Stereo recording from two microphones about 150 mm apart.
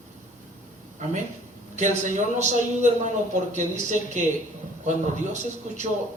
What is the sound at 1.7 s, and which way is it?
A man's voice, 55° right (ahead or behind).